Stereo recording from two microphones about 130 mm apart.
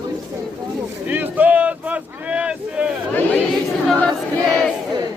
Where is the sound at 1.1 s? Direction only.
15° right (ahead or behind).